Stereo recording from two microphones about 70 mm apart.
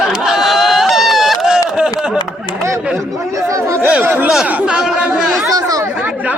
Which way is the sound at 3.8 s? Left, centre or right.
Right.